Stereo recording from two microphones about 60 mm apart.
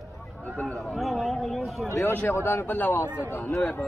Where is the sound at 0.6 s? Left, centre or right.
Left.